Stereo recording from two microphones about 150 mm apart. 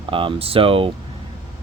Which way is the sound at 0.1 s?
35° right (ahead or behind).